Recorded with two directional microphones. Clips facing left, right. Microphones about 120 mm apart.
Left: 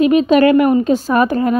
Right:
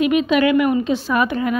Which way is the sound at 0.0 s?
35° left (ahead or behind).